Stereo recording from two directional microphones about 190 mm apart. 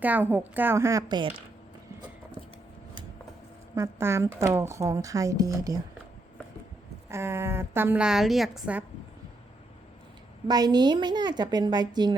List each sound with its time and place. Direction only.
0.0 s speech: 10° right (ahead or behind)
3.8 s speech: 15° right (ahead or behind)
7.1 s speech: 15° right (ahead or behind)
10.5 s a woman's voice: 20° right (ahead or behind)